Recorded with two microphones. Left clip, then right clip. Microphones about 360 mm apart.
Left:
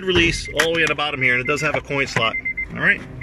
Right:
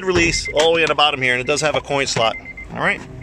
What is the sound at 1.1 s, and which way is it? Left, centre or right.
Speech, centre.